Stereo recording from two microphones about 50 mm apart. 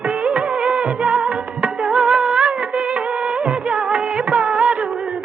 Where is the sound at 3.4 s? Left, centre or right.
Centre.